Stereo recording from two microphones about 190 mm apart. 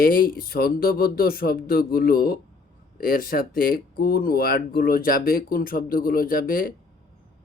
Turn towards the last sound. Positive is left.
turn(degrees=50)  # may be behind; listen again after turning